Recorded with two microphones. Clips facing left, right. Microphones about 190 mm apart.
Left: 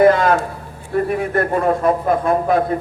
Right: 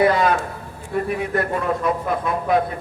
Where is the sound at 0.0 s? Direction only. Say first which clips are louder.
Left 5 dB; 50° left (ahead or behind).